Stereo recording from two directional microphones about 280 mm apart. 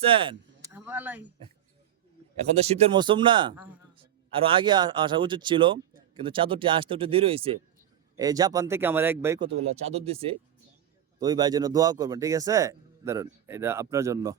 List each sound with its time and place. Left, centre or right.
0.0 s speech: centre
0.7 s speech: centre
2.6 s a man's voice: centre
9.5 s speech: right